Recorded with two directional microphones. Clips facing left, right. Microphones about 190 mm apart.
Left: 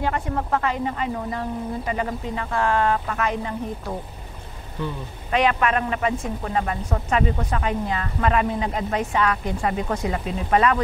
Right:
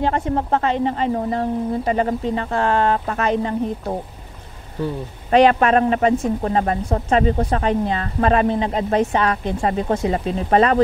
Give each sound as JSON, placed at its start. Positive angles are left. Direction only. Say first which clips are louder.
{"t": 0.0, "sound": "speech", "louder": "right 5 dB", "side_deg": -30}